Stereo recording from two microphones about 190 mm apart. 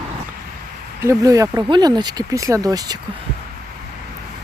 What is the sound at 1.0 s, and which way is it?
Speech, 15° right (ahead or behind).